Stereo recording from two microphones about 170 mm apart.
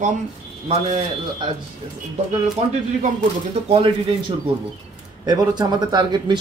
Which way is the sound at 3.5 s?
35° right (ahead or behind).